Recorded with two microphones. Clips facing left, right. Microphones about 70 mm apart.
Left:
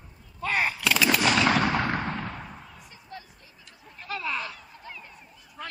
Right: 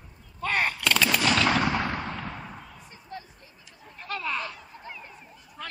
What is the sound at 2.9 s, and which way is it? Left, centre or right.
Basketball bounce, right.